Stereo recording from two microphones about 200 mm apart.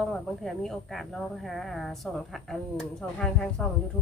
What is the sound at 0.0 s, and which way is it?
Speech, centre (ahead or behind).